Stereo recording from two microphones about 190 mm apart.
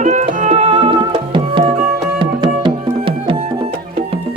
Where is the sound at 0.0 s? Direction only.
40° right (ahead or behind).